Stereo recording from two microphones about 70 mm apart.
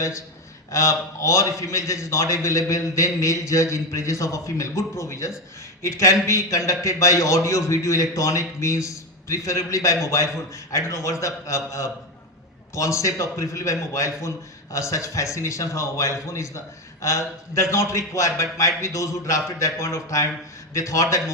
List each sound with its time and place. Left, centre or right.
0.7 s a man's voice: left